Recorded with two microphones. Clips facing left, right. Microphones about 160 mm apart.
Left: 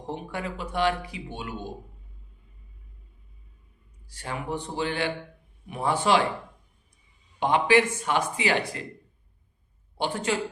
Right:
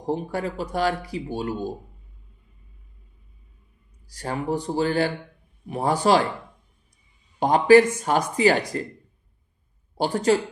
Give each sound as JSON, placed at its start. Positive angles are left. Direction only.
{"t": 0.0, "sound": "speech", "side_deg": -35}
{"t": 4.0, "sound": "speech", "side_deg": -40}
{"t": 7.3, "sound": "speech", "side_deg": -40}
{"t": 10.0, "sound": "speech", "side_deg": -40}